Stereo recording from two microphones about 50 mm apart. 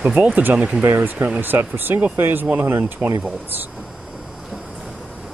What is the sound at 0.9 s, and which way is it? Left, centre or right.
Speech, right.